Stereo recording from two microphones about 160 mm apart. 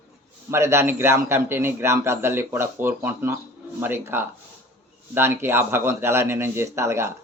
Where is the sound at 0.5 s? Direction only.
15° right (ahead or behind).